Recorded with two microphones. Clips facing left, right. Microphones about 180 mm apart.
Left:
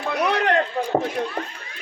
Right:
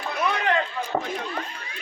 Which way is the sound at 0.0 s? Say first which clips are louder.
Left 4 dB; 65° left (ahead or behind).